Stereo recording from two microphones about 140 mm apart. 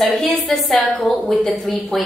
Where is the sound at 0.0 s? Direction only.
Centre (ahead or behind).